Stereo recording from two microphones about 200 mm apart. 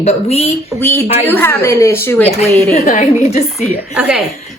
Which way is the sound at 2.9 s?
40° left (ahead or behind).